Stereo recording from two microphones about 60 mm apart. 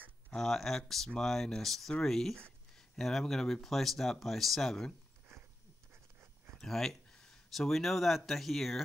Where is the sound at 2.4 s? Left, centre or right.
Centre.